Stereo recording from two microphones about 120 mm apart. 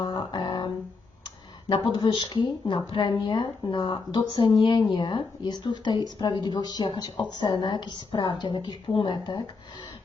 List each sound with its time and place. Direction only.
0.0 s music: 40° left (ahead or behind)
2.0 s a woman's voice: 40° left (ahead or behind)